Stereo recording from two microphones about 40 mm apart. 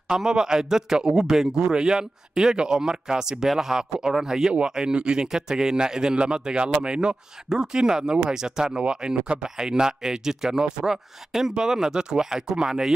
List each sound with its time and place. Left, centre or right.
0.1 s a man's voice: centre